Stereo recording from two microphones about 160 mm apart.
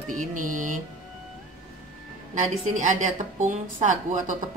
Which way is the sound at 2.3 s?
50° right (ahead or behind).